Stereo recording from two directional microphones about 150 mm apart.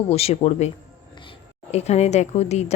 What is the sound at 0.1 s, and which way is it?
Speech, 40° left (ahead or behind).